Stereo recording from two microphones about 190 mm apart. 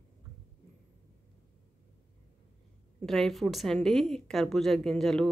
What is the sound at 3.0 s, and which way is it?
A woman's voice, centre (ahead or behind).